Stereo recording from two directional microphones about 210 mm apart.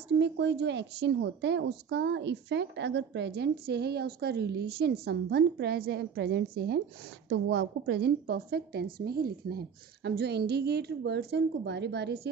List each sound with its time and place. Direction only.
0.2 s a woman's voice: 55° right (ahead or behind)
7.2 s a woman's voice: 55° right (ahead or behind)